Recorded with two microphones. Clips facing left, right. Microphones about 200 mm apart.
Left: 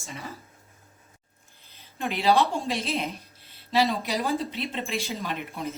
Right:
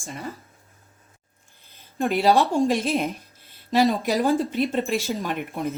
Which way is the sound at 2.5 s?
50° right (ahead or behind).